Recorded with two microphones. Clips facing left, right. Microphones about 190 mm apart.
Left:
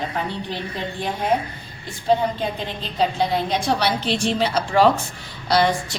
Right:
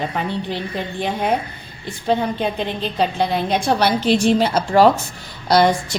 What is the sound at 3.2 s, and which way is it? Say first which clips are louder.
A woman's voice: right 2 dB; 60° right (ahead or behind).